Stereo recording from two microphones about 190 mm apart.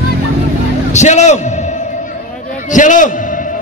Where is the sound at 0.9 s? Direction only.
35° left (ahead or behind).